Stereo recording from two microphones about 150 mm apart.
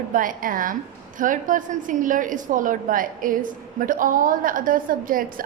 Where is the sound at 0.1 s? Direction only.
65° right (ahead or behind).